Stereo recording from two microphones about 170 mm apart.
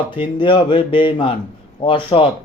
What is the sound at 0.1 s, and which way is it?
Speech, 30° left (ahead or behind).